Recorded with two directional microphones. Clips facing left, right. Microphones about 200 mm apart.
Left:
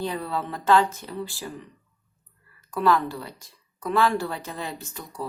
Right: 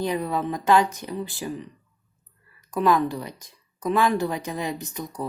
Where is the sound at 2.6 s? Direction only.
15° right (ahead or behind).